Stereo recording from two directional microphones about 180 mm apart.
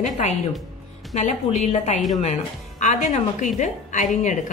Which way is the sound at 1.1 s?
40° left (ahead or behind).